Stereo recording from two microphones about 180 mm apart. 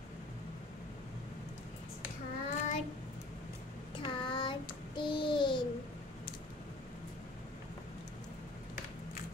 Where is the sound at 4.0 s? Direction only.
25° left (ahead or behind).